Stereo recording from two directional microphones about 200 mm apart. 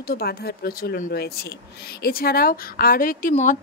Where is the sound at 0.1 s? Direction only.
50° left (ahead or behind).